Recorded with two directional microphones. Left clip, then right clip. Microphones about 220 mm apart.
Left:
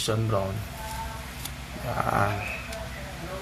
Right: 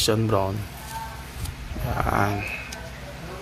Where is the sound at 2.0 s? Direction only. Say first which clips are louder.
Right 2 dB; 30° right (ahead or behind).